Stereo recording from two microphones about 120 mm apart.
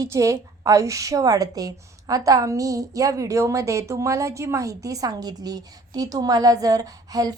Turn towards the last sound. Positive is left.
turn(degrees=-30)  # may be behind; listen again after turning